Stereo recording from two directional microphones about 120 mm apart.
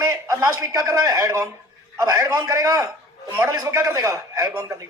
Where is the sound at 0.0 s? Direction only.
30° right (ahead or behind).